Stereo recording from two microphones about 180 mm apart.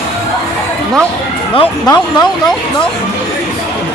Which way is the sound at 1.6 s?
25° left (ahead or behind).